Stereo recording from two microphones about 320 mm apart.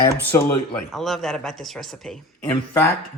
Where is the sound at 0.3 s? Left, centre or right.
Centre.